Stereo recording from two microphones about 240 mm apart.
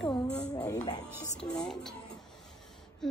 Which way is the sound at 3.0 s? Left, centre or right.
Centre.